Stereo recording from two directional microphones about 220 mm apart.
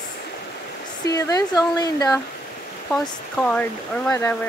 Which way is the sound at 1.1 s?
15° left (ahead or behind).